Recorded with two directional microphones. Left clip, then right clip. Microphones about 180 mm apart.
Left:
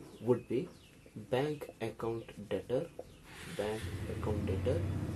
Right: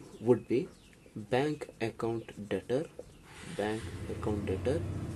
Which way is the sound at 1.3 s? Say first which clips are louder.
Right 3 dB; 55° right (ahead or behind).